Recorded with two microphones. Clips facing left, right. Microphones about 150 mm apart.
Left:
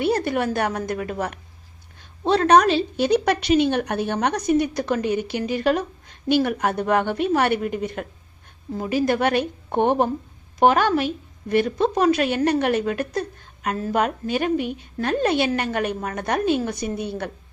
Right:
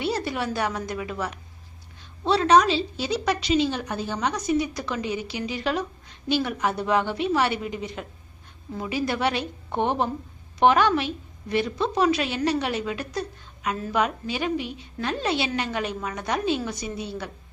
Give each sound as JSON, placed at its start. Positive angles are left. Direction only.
{"t": 0.0, "sound": "a woman's voice", "side_deg": 55}